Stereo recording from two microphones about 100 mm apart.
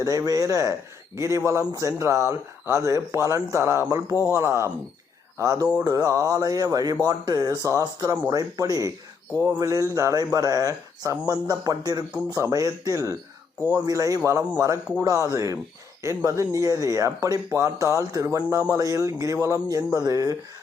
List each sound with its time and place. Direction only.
0.0 s speech: 35° right (ahead or behind)